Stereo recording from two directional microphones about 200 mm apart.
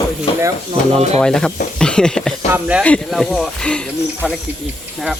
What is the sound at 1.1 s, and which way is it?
Speech, 5° left (ahead or behind).